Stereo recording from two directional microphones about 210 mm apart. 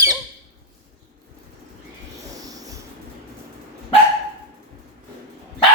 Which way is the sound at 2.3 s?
15° right (ahead or behind).